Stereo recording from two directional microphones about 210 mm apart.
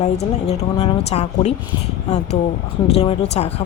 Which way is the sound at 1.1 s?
30° left (ahead or behind).